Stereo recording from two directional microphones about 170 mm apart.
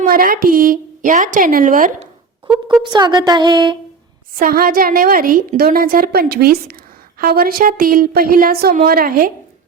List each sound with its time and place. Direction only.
0.0 s a woman's voice: 60° right (ahead or behind)
2.8 s speech: 25° right (ahead or behind)
4.4 s a woman's voice: 60° right (ahead or behind)